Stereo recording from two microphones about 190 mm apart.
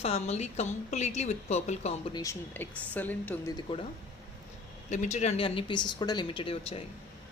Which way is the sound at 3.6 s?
25° left (ahead or behind).